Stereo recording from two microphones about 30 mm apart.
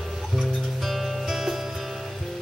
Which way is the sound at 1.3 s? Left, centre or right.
Centre.